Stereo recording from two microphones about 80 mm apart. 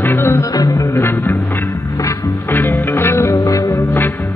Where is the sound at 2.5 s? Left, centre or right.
Left.